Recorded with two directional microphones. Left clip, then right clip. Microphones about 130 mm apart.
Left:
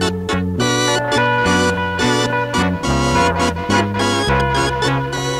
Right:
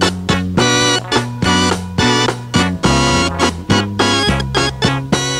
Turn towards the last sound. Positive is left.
turn(degrees=45)  # may be behind; listen again after turning